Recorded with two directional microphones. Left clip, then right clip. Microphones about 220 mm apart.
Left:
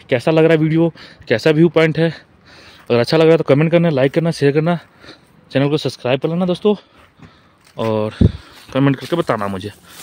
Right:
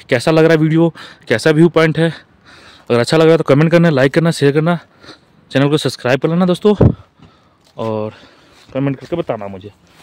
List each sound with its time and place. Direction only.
0.0 s speech: 15° right (ahead or behind)
7.7 s speech: 5° left (ahead or behind)
9.5 s speech: 25° left (ahead or behind)